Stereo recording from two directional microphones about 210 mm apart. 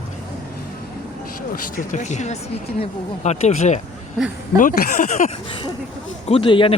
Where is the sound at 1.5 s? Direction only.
40° left (ahead or behind).